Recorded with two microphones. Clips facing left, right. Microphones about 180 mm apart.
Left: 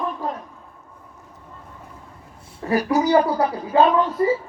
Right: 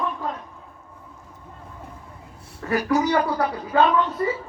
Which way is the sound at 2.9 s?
30° left (ahead or behind).